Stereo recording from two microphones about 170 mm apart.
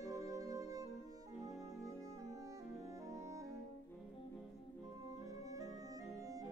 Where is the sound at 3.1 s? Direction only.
20° right (ahead or behind).